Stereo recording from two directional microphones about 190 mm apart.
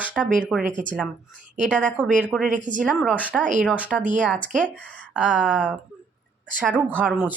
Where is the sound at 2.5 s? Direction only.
40° right (ahead or behind).